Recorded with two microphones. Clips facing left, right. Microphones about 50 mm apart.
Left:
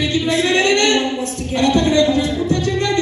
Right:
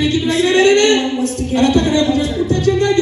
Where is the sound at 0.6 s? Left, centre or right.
Right.